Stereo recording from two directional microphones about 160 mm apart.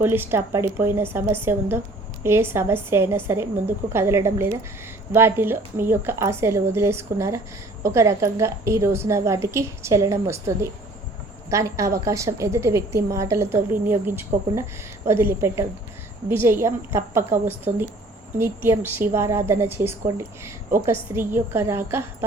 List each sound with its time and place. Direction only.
0.0 s a woman's voice: 15° right (ahead or behind)